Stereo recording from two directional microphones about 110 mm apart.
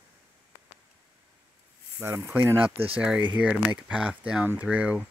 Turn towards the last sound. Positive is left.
turn(degrees=-10)  # may be behind; listen again after turning